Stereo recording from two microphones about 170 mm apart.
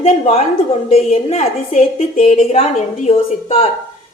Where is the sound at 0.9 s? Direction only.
40° left (ahead or behind).